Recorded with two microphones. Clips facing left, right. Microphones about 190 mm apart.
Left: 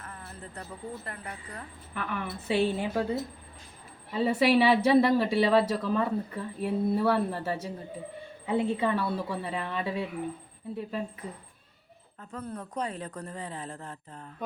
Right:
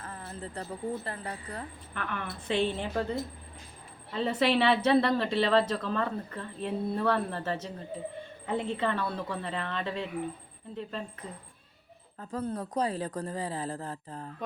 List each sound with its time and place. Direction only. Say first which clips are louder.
0.0 s a sound: right 4 dB; 30° right (ahead or behind)
1.0 s a woman's voice: right 3 dB; 30° right (ahead or behind)
1.9 s speech: left 4 dB; 10° left (ahead or behind)
12.3 s a woman's voice: right 5 dB; 35° right (ahead or behind)